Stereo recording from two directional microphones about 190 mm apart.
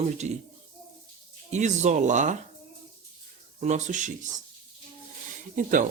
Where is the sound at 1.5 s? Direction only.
40° right (ahead or behind).